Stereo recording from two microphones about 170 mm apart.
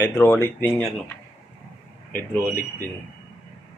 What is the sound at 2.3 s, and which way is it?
Speech, 15° left (ahead or behind).